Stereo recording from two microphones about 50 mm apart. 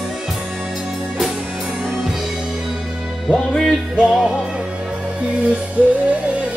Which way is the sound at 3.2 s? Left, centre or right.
Centre.